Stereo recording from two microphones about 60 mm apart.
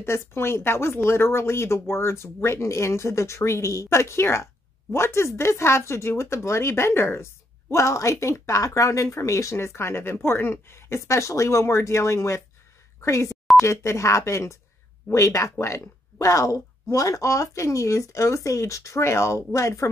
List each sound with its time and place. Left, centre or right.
0.0 s speech: left
7.7 s speech: left